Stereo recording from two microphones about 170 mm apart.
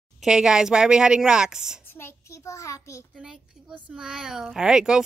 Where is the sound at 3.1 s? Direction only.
5° right (ahead or behind).